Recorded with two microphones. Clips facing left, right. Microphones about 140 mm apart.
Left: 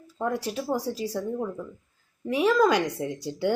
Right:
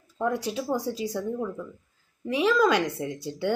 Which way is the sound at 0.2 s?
5° left (ahead or behind).